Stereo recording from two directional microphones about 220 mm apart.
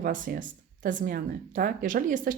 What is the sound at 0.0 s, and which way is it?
Speech, 40° right (ahead or behind).